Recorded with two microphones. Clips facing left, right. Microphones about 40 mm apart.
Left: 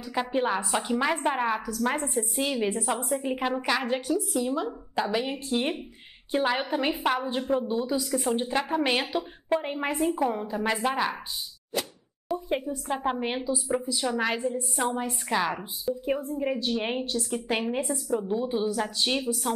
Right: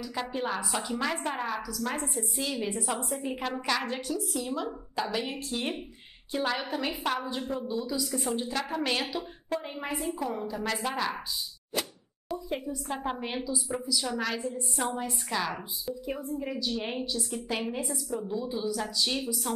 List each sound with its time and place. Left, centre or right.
0.3 s a woman's voice: left
7.5 s a woman's voice: left
10.2 s a woman's voice: left
12.4 s a woman's voice: left
15.9 s a woman's voice: left